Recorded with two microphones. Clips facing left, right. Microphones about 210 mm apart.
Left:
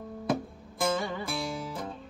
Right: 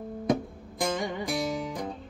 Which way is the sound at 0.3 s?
15° right (ahead or behind).